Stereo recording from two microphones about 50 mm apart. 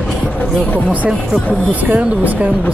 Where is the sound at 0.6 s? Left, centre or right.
Left.